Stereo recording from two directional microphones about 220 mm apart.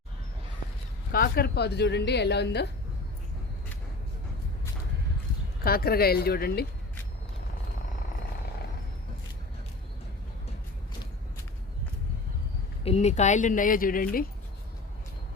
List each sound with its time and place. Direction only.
1.1 s a woman's voice: 40° left (ahead or behind)
5.6 s a woman's voice: 45° left (ahead or behind)
12.8 s a woman's voice: 30° left (ahead or behind)